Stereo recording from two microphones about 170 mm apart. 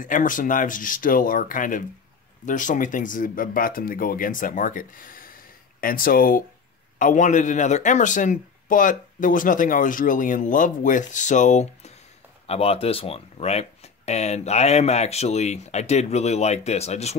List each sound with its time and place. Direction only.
0.0 s speech: 50° left (ahead or behind)